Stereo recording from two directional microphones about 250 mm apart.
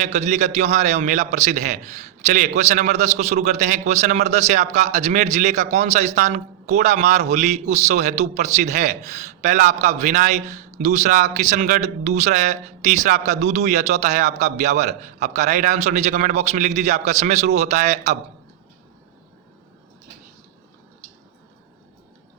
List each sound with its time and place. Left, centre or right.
0.0 s a man's voice: right